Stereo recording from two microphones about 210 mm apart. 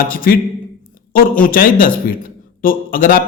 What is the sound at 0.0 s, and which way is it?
A man's voice, 45° left (ahead or behind).